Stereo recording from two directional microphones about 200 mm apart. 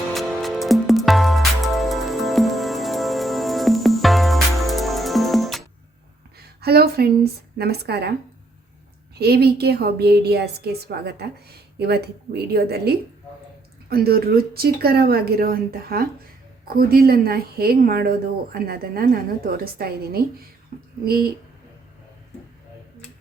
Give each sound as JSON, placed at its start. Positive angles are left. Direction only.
{"t": 0.1, "sound": "music", "side_deg": 0}
{"t": 6.6, "sound": "a woman's voice", "side_deg": -55}
{"t": 9.1, "sound": "a woman's voice", "side_deg": -55}